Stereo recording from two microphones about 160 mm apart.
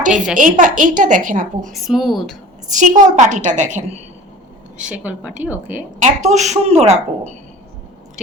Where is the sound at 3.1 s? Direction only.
50° right (ahead or behind).